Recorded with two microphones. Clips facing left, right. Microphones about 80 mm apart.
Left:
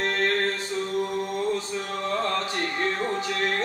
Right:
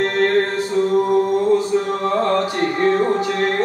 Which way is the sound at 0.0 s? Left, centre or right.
Right.